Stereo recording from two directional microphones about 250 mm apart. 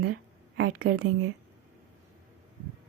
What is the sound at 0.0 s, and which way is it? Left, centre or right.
Speech, right.